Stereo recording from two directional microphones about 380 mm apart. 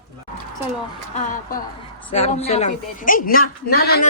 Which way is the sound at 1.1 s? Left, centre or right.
Left.